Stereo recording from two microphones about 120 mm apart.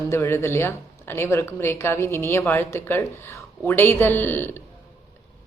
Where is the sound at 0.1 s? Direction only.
20° left (ahead or behind).